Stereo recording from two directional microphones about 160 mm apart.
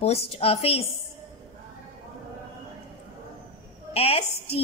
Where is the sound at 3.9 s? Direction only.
40° left (ahead or behind).